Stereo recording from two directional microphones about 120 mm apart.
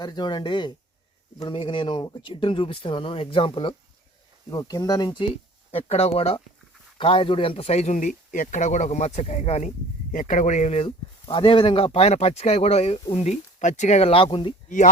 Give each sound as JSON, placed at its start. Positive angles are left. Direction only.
{"t": 0.0, "sound": "speech", "side_deg": 35}
{"t": 4.5, "sound": "speech", "side_deg": 30}
{"t": 5.7, "sound": "speech", "side_deg": 60}
{"t": 10.8, "sound": "speech", "side_deg": 45}